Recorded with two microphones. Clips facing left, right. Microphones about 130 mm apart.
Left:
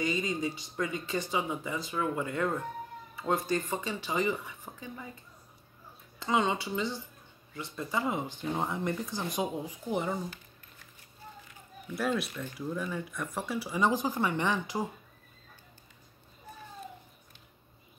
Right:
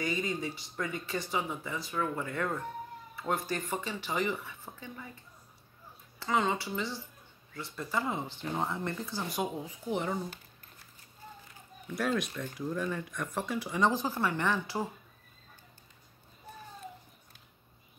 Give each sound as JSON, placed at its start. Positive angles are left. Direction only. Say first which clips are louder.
{"t": 0.0, "sound": "speech", "louder": "left 2 dB", "side_deg": 20}
{"t": 6.1, "sound": "speech", "louder": "left 1 dB", "side_deg": 20}
{"t": 11.9, "sound": "speech", "louder": "even", "side_deg": 0}